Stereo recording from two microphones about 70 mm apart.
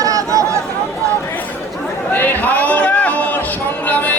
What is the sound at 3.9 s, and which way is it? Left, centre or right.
Music, left.